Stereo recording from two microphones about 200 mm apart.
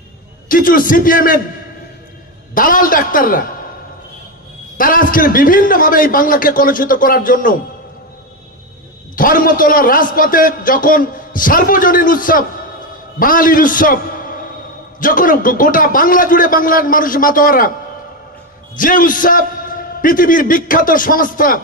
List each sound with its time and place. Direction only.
0.5 s a man's voice: 45° left (ahead or behind)
2.5 s a man's voice: 45° left (ahead or behind)
4.7 s a man's voice: 45° left (ahead or behind)
9.1 s a man's voice: 45° left (ahead or behind)
18.8 s a man's voice: 45° left (ahead or behind)